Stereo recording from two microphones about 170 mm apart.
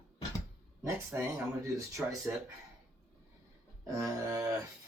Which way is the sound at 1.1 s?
20° right (ahead or behind).